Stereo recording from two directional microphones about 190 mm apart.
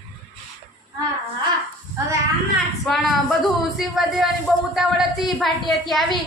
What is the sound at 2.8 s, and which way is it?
A woman's voice, centre (ahead or behind).